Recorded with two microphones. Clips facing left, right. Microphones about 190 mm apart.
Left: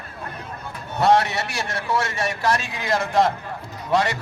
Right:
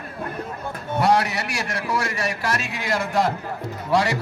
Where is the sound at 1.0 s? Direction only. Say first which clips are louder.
Left 2 dB; 25° left (ahead or behind).